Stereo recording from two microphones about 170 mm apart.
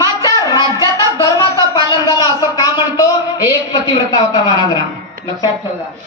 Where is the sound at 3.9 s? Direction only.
20° left (ahead or behind).